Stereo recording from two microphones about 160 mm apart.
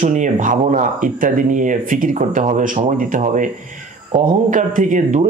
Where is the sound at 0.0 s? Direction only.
55° right (ahead or behind).